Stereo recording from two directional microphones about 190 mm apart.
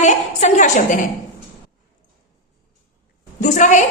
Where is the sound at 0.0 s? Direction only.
40° left (ahead or behind).